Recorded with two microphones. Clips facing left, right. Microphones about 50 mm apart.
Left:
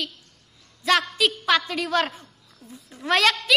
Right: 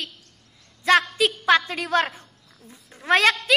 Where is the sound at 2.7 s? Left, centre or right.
Right.